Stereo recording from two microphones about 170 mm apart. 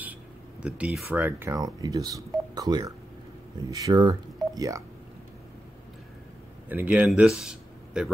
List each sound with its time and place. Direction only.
0.6 s speech: 5° right (ahead or behind)
6.7 s speech: 10° right (ahead or behind)